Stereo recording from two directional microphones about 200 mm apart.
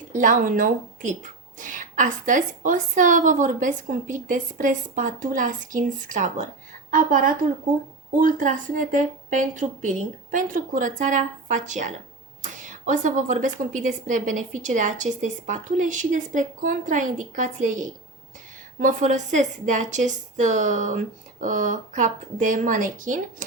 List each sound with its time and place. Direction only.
0.1 s a woman's voice: 40° right (ahead or behind)